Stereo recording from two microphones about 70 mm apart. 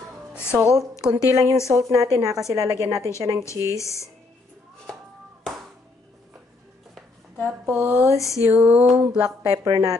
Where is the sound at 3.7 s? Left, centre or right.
Left.